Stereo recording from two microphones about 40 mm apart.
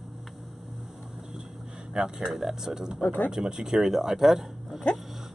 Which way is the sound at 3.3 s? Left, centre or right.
Centre.